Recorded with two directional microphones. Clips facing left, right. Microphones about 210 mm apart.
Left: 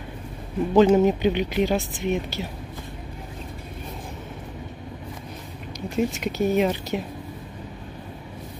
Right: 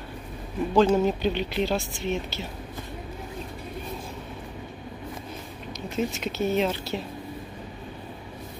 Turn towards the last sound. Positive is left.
turn(degrees=15)  # may be behind; listen again after turning